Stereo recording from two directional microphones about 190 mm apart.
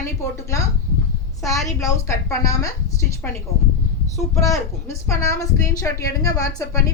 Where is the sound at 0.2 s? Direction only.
15° left (ahead or behind).